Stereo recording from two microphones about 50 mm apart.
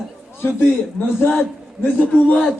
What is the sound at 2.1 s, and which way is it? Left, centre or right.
Speech, left.